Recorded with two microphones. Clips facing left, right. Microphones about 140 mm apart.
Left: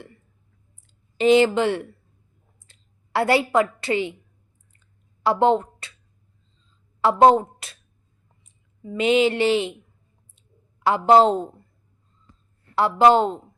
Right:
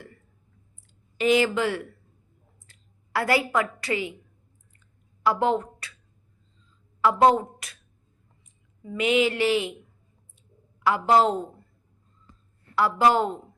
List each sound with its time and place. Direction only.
1.2 s mantra: 25° left (ahead or behind)
2.6 s a sound: 25° left (ahead or behind)
5.2 s a woman's voice: 25° left (ahead or behind)
7.0 s a sound: 30° left (ahead or behind)
8.8 s mantra: 25° left (ahead or behind)
10.8 s mantra: 25° left (ahead or behind)
12.7 s mantra: 25° left (ahead or behind)